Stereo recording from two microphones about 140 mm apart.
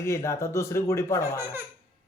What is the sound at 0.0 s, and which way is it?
Speech, 20° left (ahead or behind).